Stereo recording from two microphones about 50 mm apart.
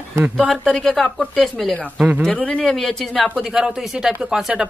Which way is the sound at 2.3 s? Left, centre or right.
Left.